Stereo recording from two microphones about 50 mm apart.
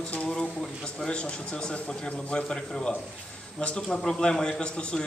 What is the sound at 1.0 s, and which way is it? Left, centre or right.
A man's voice, centre.